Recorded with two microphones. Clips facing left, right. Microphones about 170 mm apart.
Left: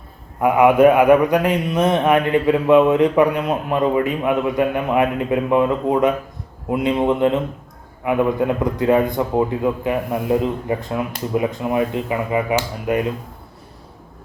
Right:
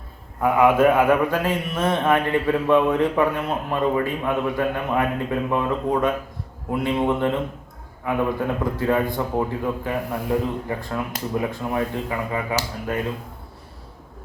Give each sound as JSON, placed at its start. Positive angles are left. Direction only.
{"t": 0.4, "sound": "a man's voice", "side_deg": 15}